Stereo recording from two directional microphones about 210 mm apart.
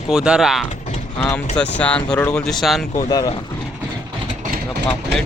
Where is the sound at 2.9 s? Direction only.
20° left (ahead or behind).